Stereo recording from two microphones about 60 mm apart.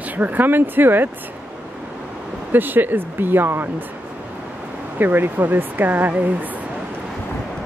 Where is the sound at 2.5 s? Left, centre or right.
Right.